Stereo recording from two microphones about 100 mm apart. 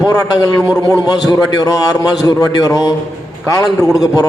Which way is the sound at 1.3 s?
40° left (ahead or behind).